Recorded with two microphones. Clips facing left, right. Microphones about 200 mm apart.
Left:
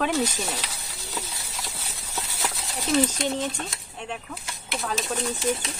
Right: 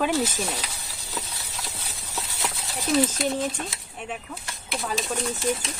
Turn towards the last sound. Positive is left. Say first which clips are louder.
# even
turn(degrees=0)  # may be behind; listen again after turning